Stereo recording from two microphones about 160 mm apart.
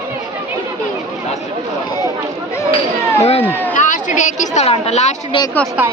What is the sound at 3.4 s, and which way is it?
Speech, 10° left (ahead or behind).